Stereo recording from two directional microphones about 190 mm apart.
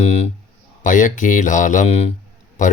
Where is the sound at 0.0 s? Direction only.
35° left (ahead or behind).